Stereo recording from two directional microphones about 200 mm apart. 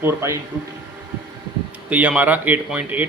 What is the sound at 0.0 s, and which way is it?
Speech, 15° right (ahead or behind).